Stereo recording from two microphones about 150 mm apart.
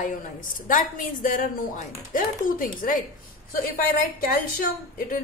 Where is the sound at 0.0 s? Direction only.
60° left (ahead or behind).